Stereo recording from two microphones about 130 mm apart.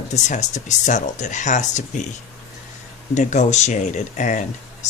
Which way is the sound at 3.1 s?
70° left (ahead or behind).